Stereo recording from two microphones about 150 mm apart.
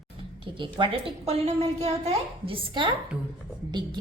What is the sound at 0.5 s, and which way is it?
Speech, 35° right (ahead or behind).